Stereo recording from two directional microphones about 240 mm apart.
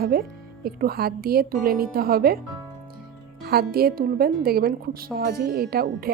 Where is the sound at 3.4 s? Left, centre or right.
Right.